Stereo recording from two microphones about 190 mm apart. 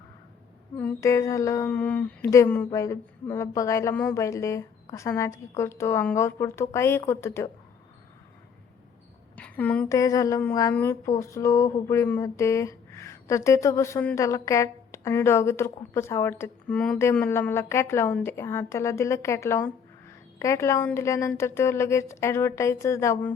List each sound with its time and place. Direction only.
0.8 s speech: 10° left (ahead or behind)
9.3 s speech: 10° left (ahead or behind)